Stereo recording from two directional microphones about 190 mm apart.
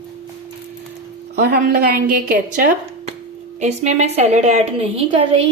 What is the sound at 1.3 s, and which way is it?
A woman's voice, 55° right (ahead or behind).